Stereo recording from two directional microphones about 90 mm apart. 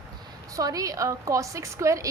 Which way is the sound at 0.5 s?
40° right (ahead or behind).